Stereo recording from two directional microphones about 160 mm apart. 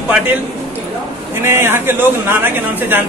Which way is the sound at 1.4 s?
15° right (ahead or behind).